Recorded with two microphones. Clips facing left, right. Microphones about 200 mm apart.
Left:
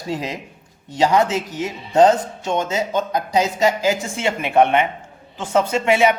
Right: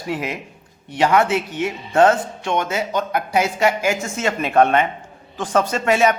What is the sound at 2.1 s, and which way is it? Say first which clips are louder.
Music: even; 40° left (ahead or behind).